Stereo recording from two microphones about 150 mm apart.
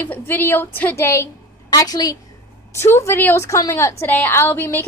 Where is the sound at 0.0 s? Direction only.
15° left (ahead or behind).